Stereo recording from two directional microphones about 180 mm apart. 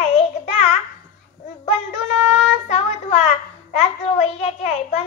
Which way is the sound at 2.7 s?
35° left (ahead or behind).